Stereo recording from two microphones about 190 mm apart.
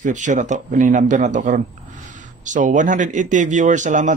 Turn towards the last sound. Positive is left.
turn(degrees=-40)  # may be behind; listen again after turning